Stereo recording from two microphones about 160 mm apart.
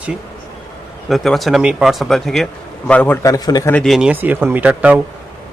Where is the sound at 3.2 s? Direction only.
25° left (ahead or behind).